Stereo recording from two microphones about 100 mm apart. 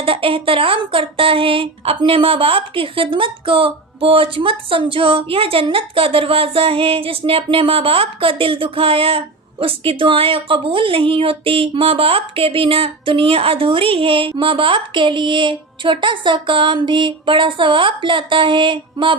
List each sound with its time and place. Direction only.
0.0 s speech: 65° right (ahead or behind)